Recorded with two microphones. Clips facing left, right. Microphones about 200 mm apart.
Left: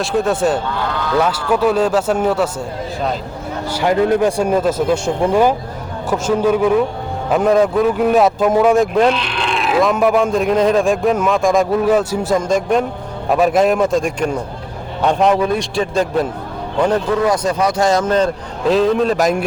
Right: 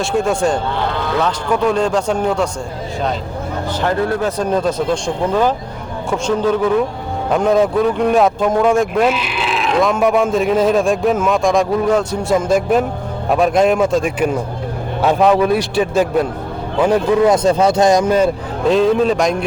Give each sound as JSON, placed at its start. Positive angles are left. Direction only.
{"t": 0.0, "sound": "a man's voice", "side_deg": 0}
{"t": 3.7, "sound": "a man's voice", "side_deg": 10}
{"t": 17.2, "sound": "speech", "side_deg": -25}
{"t": 18.7, "sound": "a man's voice", "side_deg": 0}